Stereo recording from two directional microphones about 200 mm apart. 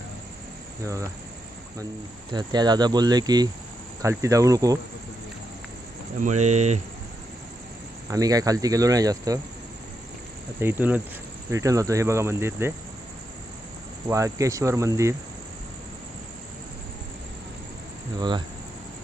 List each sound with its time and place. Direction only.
0.9 s speech: 15° right (ahead or behind)
2.3 s speech: 20° right (ahead or behind)
6.2 s speech: 35° right (ahead or behind)
8.1 s speech: 20° right (ahead or behind)
10.6 s speech: 10° right (ahead or behind)
14.1 s speech: 15° right (ahead or behind)
18.2 s speech: 20° right (ahead or behind)